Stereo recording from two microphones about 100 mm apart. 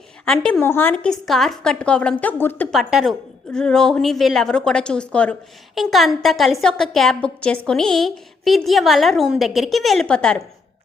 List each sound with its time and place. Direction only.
0.3 s a woman's voice: 5° left (ahead or behind)
0.6 s a woman's voice: 20° left (ahead or behind)
1.2 s a woman's voice: centre (ahead or behind); by 2.6 s 20° left (ahead or behind)
2.6 s a woman's voice: centre (ahead or behind)
5.7 s a woman's voice: centre (ahead or behind)